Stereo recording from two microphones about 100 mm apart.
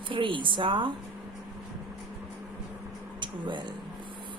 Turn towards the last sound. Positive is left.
turn(degrees=-55)  # may be behind; listen again after turning